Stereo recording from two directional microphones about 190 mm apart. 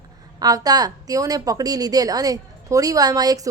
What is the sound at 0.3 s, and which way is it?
A woman's voice, 20° right (ahead or behind).